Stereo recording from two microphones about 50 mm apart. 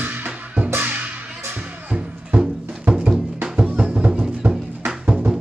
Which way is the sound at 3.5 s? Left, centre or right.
Right.